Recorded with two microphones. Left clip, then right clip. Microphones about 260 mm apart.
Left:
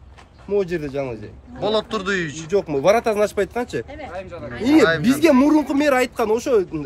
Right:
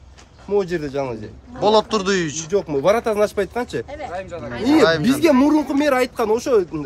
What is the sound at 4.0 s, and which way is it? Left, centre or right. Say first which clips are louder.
Speech: right 3 dB; right.